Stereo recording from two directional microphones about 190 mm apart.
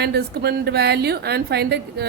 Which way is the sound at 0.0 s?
60° right (ahead or behind).